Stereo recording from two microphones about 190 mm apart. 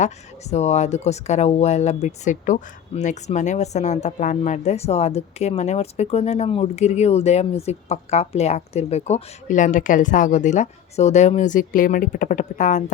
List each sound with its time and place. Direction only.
0.5 s speech: 35° left (ahead or behind)